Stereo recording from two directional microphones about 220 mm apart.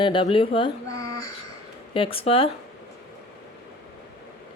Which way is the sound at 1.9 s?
25° left (ahead or behind).